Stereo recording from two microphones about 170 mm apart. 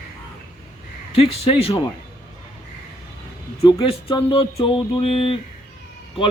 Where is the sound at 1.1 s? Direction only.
35° left (ahead or behind).